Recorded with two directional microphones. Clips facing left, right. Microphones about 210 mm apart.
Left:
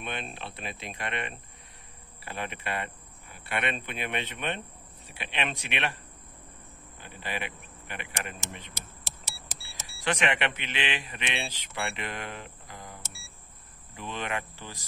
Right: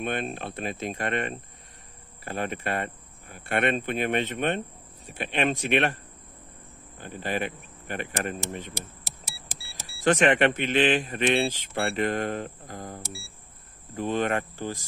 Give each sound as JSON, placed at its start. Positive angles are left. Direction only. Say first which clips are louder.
{"t": 0.0, "sound": "speech", "louder": "right 7 dB", "side_deg": -50}
{"t": 7.0, "sound": "speech", "louder": "right 7 dB", "side_deg": -50}
{"t": 9.9, "sound": "speech", "louder": "right 8 dB", "side_deg": -50}